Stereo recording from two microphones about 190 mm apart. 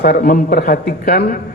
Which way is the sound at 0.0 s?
50° left (ahead or behind).